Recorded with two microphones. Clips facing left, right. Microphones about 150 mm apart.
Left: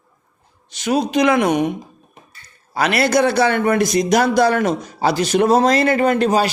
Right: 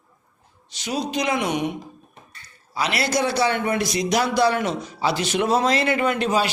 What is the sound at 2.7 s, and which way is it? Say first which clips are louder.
A man's voice: left 7 dB; 55° left (ahead or behind).